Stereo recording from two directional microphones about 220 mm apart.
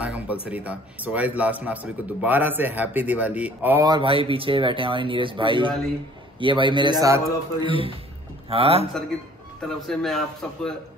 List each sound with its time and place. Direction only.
0.0 s a man's voice: 5° right (ahead or behind)
8.5 s speech: 25° right (ahead or behind)
9.6 s speech: centre (ahead or behind)